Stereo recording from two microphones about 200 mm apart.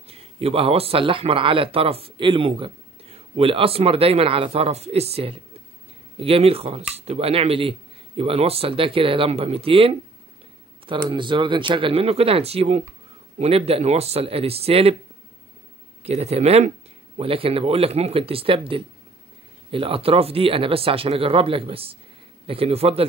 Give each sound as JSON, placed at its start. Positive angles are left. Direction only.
{"t": 0.1, "sound": "speech", "side_deg": -30}
{"t": 11.1, "sound": "speech", "side_deg": -25}
{"t": 16.0, "sound": "speech", "side_deg": -30}